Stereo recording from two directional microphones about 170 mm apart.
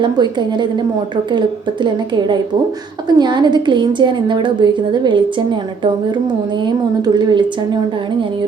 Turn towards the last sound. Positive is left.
turn(degrees=-25)  # may be behind; listen again after turning